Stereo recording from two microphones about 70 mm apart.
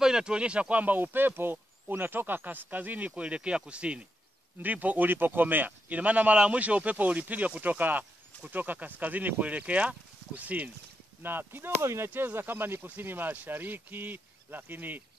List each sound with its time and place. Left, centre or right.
0.0 s speech: centre; by 15.0 s right